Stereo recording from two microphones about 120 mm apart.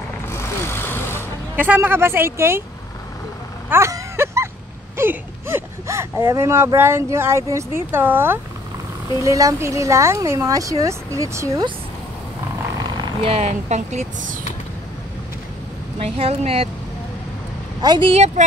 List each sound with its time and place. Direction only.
0.3 s vehicle: 20° left (ahead or behind)
1.6 s speech: 15° right (ahead or behind)
3.7 s vehicle: 20° right (ahead or behind)
4.9 s speech: 20° right (ahead or behind)
9.2 s speech: 25° right (ahead or behind)
13.2 s speech: 60° right (ahead or behind); by 14.3 s 75° right (ahead or behind)
16.0 s speech: 55° right (ahead or behind)
17.8 s a woman's voice: 35° right (ahead or behind)
18.1 s speech: 65° right (ahead or behind)